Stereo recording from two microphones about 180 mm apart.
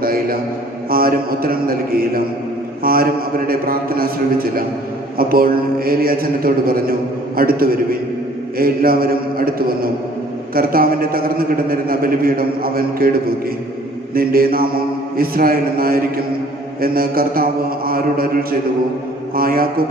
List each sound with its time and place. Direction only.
0.0 s a sound: 55° right (ahead or behind)
0.8 s a man's voice: 55° right (ahead or behind)
14.1 s a man's voice: 55° right (ahead or behind)